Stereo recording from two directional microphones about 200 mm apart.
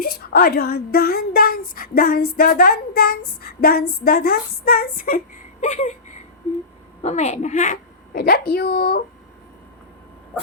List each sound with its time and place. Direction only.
0.0 s a woman's voice: 50° left (ahead or behind)
2.3 s female singing: 50° left (ahead or behind)
7.0 s female singing: 35° left (ahead or behind); by 9.0 s 50° left (ahead or behind)